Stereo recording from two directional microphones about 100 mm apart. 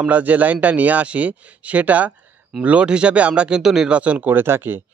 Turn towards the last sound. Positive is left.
turn(degrees=-20)  # may be behind; listen again after turning